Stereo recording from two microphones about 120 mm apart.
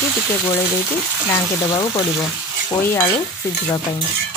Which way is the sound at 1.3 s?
30° left (ahead or behind).